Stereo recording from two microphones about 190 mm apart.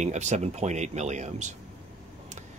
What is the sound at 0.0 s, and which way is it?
Speech, 35° right (ahead or behind).